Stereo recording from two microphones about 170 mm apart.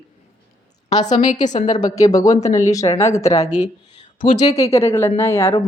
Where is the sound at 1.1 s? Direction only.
45° left (ahead or behind).